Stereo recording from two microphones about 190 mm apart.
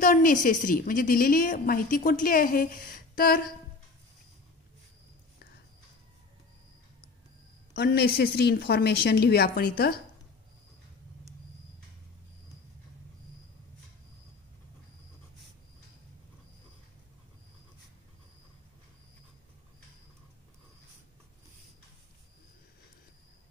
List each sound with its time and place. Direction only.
0.0 s a woman's voice: 45° left (ahead or behind)
7.7 s a woman's voice: 55° left (ahead or behind)